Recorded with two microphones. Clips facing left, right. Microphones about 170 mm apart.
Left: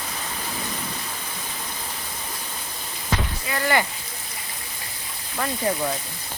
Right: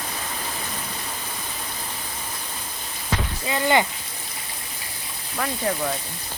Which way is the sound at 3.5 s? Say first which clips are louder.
Right 3 dB; 20° right (ahead or behind).